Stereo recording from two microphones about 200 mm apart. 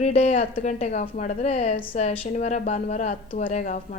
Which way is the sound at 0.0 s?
30° left (ahead or behind).